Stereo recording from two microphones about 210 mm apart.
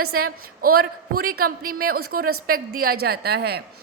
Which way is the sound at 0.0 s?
45° right (ahead or behind).